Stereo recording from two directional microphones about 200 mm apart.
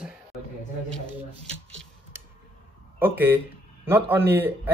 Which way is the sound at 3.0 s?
10° right (ahead or behind).